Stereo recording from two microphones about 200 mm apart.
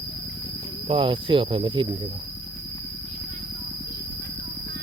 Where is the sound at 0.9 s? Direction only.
25° right (ahead or behind).